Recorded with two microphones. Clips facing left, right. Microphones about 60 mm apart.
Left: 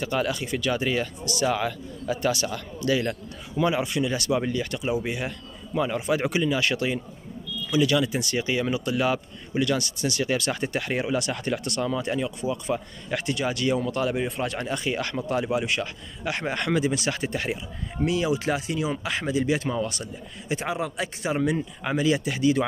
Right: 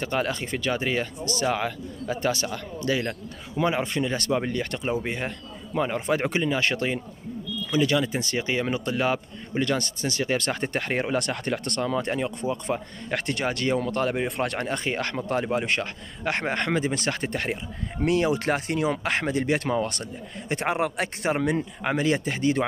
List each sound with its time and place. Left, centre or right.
0.0 s speech: right